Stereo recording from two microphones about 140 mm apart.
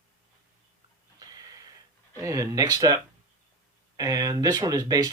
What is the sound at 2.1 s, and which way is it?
Speech, 25° right (ahead or behind).